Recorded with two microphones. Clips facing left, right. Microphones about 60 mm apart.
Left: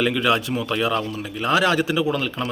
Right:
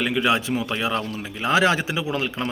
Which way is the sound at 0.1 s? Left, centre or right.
Centre.